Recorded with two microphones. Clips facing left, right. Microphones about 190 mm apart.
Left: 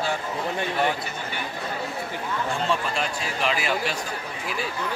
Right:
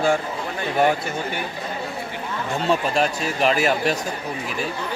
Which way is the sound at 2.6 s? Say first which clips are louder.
Right 9 dB; 45° right (ahead or behind).